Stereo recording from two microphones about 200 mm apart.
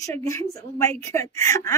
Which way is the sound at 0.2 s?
15° left (ahead or behind).